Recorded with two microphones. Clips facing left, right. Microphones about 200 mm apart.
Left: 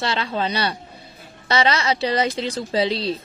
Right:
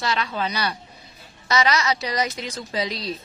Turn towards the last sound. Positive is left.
turn(degrees=30)  # may be behind; listen again after turning